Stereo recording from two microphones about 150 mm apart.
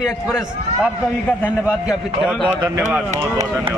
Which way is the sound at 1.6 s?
10° right (ahead or behind).